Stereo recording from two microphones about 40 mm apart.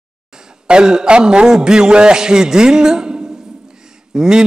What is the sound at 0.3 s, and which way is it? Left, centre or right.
A man's voice, centre.